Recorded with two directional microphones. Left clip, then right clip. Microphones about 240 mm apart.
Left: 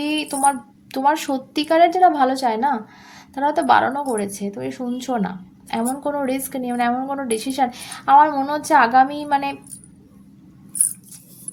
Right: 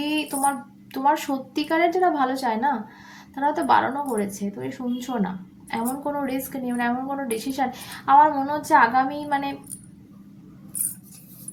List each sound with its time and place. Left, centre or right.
0.0 s a woman's voice: left